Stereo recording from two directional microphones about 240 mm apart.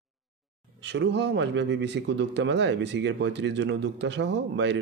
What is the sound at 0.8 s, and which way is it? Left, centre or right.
Speech, right.